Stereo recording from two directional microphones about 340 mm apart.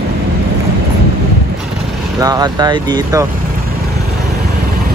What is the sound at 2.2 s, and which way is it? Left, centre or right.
Speech, centre.